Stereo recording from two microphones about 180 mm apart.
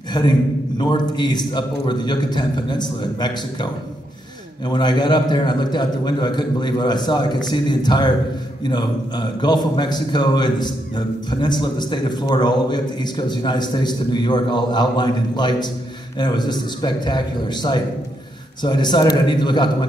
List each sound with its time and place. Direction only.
0.1 s a man's voice: 25° left (ahead or behind)